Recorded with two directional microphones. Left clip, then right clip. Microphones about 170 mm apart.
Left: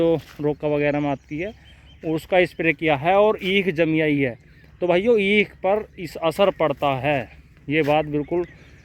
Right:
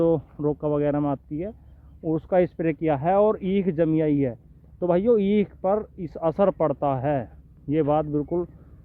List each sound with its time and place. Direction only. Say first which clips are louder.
0.0 s speech: left 2 dB; centre (ahead or behind)
2.6 s speech: left 4 dB; centre (ahead or behind)